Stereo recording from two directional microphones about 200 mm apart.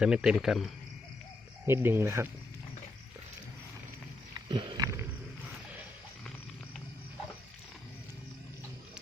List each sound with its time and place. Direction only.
0.0 s speech: 5° right (ahead or behind)
1.6 s speech: 10° right (ahead or behind)
4.4 s wild animals: 20° right (ahead or behind)